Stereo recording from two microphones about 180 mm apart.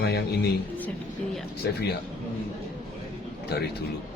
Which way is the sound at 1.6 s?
65° left (ahead or behind).